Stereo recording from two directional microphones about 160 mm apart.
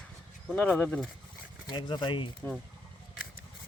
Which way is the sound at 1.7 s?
30° left (ahead or behind).